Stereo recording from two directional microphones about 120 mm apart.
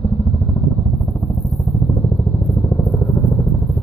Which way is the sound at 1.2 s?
25° left (ahead or behind).